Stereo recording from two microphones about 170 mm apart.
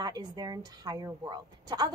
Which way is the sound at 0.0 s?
25° right (ahead or behind).